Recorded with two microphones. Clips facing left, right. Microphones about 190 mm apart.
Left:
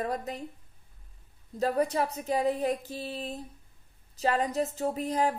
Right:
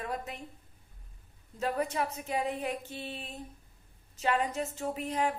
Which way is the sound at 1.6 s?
35° left (ahead or behind).